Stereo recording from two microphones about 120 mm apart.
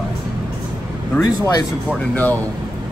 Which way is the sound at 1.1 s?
25° left (ahead or behind).